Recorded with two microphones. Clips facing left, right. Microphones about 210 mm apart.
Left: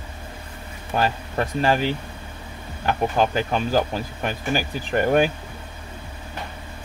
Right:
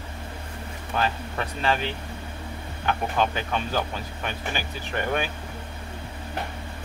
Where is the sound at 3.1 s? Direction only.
40° left (ahead or behind).